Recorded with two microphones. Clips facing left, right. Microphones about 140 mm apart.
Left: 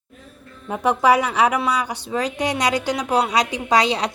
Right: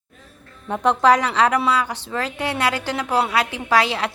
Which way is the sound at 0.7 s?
10° left (ahead or behind).